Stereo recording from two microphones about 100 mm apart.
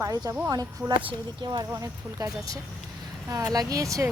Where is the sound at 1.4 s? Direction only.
45° right (ahead or behind).